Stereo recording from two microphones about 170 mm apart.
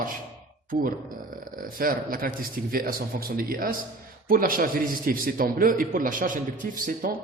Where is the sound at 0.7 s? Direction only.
55° right (ahead or behind).